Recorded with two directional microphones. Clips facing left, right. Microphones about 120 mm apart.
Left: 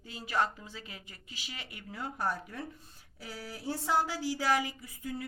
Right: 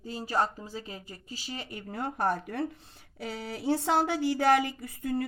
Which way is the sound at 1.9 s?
55° right (ahead or behind).